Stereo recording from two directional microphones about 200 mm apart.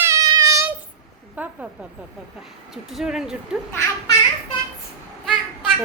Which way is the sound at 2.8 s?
Centre (ahead or behind).